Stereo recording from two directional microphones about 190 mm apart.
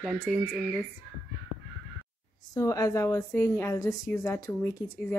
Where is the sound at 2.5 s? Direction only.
15° left (ahead or behind).